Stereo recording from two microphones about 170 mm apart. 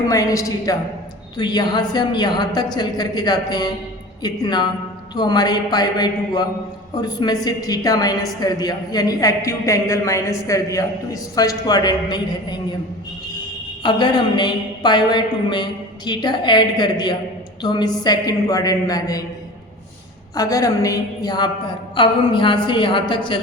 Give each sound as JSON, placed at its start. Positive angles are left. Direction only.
{"t": 0.1, "sound": "a woman's voice", "side_deg": 20}
{"t": 13.8, "sound": "a woman's voice", "side_deg": 25}
{"t": 20.3, "sound": "a woman's voice", "side_deg": 20}